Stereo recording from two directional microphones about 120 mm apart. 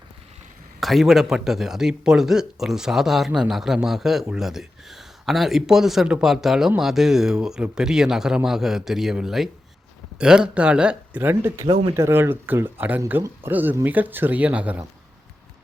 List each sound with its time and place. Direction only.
0.8 s a man's voice: centre (ahead or behind); by 11.6 s 20° right (ahead or behind)
11.6 s speech: 40° right (ahead or behind)
11.9 s speech: 20° right (ahead or behind)